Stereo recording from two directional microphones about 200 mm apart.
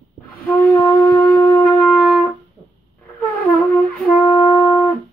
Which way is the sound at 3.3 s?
10° left (ahead or behind).